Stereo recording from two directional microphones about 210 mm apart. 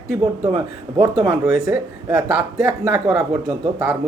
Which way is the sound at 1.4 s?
5° right (ahead or behind).